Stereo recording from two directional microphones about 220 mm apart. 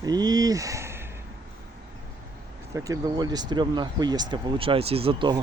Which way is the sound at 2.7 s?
15° right (ahead or behind).